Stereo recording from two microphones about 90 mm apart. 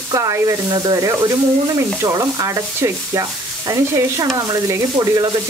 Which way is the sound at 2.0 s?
40° right (ahead or behind).